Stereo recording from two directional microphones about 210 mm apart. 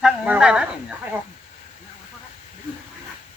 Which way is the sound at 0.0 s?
5° right (ahead or behind).